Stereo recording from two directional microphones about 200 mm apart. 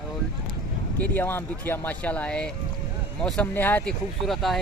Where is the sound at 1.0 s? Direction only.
10° left (ahead or behind).